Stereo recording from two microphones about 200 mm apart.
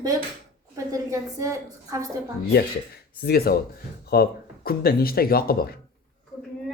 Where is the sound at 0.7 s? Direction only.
15° right (ahead or behind).